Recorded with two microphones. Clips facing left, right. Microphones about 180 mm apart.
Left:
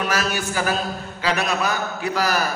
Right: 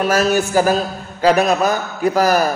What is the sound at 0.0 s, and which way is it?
A woman's voice, 40° right (ahead or behind).